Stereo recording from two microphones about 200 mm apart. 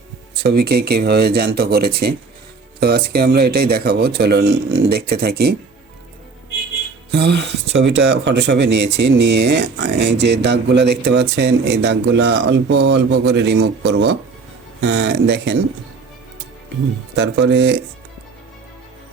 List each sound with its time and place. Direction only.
0.3 s speech: 55° right (ahead or behind)
7.1 s speech: 55° right (ahead or behind)
17.2 s speech: 60° right (ahead or behind)